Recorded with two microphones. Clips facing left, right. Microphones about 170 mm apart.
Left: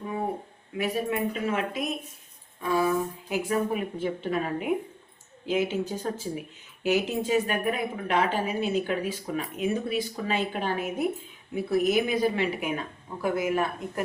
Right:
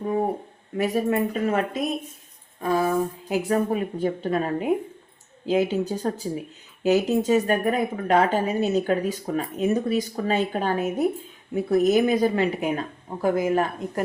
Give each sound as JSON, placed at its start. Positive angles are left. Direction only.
{"t": 0.8, "sound": "a woman's voice", "side_deg": -40}